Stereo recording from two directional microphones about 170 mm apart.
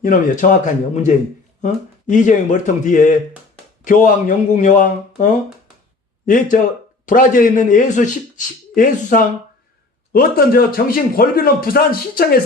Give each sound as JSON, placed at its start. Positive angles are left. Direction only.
{"t": 0.0, "sound": "speech", "side_deg": 50}